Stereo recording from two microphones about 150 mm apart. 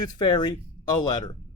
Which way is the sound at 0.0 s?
30° left (ahead or behind).